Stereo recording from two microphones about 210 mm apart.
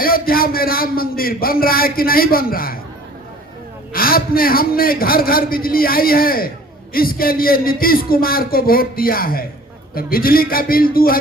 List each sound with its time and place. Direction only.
0.0 s a man's voice: 45° left (ahead or behind)
3.9 s a man's voice: 45° left (ahead or behind)